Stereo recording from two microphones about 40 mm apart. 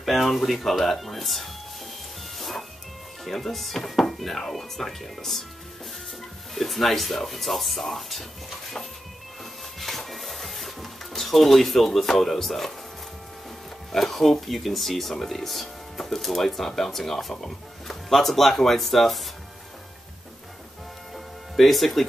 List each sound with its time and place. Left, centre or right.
0.0 s speech: centre
2.3 s music: centre
3.3 s speech: centre
6.5 s speech: centre
9.8 s music: centre
12.2 s speech: centre
13.9 s speech: centre
21.5 s speech: centre